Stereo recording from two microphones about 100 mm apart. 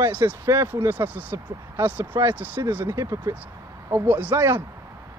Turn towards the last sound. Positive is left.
turn(degrees=-15)  # may be behind; listen again after turning